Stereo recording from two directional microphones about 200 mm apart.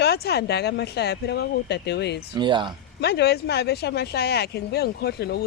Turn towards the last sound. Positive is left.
turn(degrees=55)  # may be behind; listen again after turning